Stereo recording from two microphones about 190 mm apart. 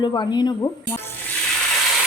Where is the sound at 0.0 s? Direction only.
25° left (ahead or behind).